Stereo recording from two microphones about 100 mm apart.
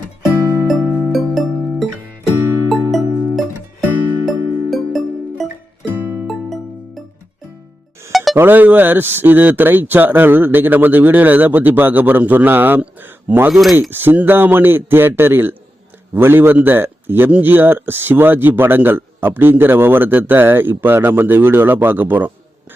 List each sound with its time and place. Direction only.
0.7 s music: centre (ahead or behind)
8.1 s music: centre (ahead or behind)
8.4 s a man's voice: 20° right (ahead or behind)
13.5 s speech: centre (ahead or behind)
13.9 s a man's voice: 20° right (ahead or behind)